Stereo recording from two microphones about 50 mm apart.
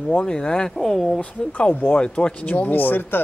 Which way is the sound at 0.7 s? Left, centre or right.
Centre.